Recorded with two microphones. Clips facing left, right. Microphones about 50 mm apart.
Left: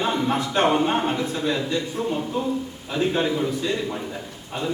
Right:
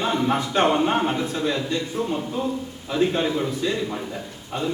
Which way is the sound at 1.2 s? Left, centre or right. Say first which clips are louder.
Even; left.